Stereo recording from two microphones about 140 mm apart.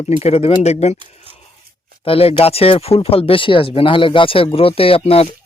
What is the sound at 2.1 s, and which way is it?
Speech, 40° left (ahead or behind).